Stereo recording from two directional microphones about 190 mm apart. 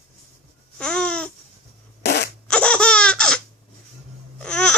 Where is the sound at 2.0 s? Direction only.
60° left (ahead or behind).